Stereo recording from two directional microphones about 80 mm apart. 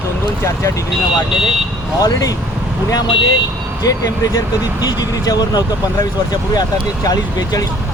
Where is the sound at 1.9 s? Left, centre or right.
Left.